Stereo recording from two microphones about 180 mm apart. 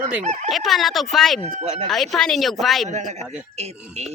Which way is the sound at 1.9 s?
Centre (ahead or behind).